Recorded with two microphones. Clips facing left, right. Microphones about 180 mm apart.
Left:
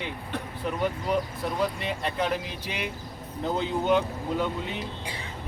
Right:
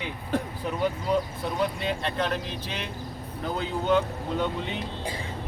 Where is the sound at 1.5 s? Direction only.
5° left (ahead or behind).